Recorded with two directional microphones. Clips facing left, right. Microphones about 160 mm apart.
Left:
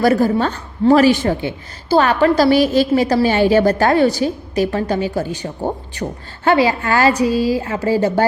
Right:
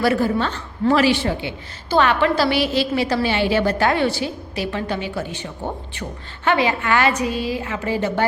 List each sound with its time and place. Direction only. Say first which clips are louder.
0.0 s a woman's voice: left 4 dB; 40° left (ahead or behind)